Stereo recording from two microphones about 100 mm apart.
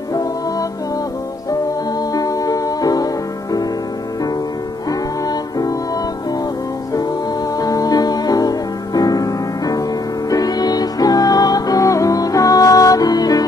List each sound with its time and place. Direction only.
0.1 s music: 35° left (ahead or behind)
2.1 s music: 35° left (ahead or behind)
5.2 s music: 40° left (ahead or behind)
7.5 s music: 40° left (ahead or behind)